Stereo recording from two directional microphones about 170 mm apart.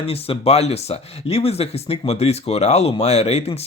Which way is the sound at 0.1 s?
35° left (ahead or behind).